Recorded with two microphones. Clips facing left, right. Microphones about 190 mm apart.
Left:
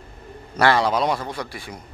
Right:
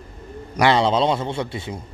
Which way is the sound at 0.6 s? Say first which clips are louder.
Right 2 dB; 20° right (ahead or behind).